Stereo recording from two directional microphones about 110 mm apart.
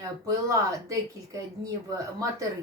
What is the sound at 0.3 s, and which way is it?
Speech, 30° right (ahead or behind).